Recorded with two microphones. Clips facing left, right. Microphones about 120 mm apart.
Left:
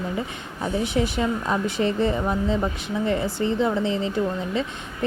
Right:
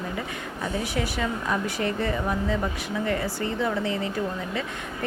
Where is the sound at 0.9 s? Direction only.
25° left (ahead or behind).